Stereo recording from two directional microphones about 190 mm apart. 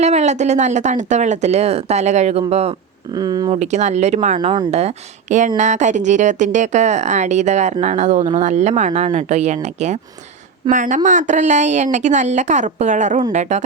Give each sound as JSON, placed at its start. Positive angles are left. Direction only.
{"t": 0.0, "sound": "speech", "side_deg": -35}
{"t": 3.1, "sound": "speech", "side_deg": -20}
{"t": 3.5, "sound": "speech", "side_deg": -35}
{"t": 4.4, "sound": "speech", "side_deg": -25}
{"t": 4.7, "sound": "speech", "side_deg": -35}